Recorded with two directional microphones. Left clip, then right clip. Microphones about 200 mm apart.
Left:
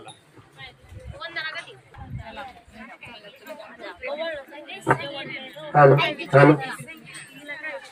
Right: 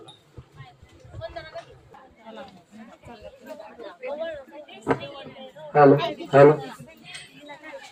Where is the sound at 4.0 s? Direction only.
40° right (ahead or behind).